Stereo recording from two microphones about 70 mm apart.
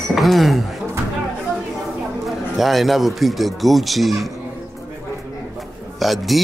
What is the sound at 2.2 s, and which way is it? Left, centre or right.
A man's voice, centre.